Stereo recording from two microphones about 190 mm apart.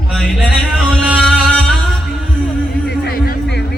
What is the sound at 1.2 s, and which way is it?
Music, 5° left (ahead or behind).